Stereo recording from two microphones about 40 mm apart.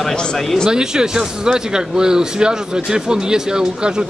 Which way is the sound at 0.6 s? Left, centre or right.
Centre.